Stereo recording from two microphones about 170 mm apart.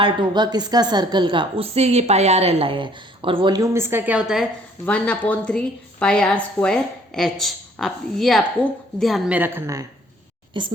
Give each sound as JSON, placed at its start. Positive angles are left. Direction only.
{"t": 0.0, "sound": "a woman's voice", "side_deg": -25}
{"t": 4.9, "sound": "a woman's voice", "side_deg": 5}
{"t": 10.5, "sound": "a woman's voice", "side_deg": -30}